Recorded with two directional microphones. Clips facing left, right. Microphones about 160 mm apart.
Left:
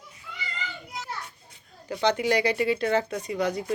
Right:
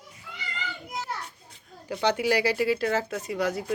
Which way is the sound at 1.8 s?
10° right (ahead or behind).